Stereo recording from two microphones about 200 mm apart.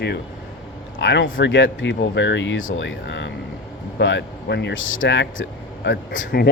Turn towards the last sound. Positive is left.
turn(degrees=55)  # may be behind; listen again after turning